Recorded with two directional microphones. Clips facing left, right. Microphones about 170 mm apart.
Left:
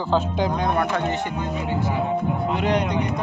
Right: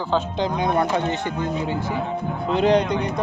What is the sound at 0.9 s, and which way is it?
Speech, 25° right (ahead or behind).